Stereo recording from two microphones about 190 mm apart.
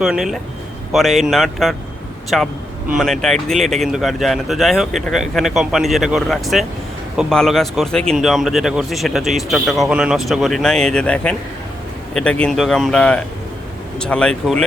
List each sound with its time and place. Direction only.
0.0 s a man's voice: centre (ahead or behind)